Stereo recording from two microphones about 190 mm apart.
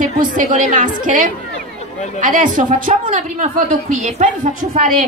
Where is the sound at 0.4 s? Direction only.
40° right (ahead or behind).